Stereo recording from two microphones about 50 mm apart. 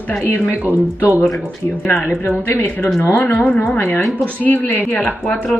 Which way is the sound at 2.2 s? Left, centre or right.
Left.